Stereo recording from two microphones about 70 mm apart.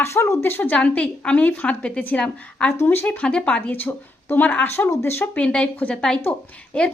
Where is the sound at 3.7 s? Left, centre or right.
Left.